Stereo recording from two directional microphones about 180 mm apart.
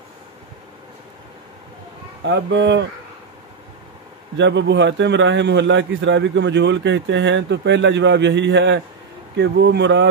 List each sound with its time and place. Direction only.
2.2 s speech: 70° right (ahead or behind)
4.4 s a man's voice: 75° right (ahead or behind)